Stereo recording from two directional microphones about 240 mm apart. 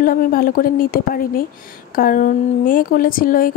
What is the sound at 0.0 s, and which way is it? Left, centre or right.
Speech, left.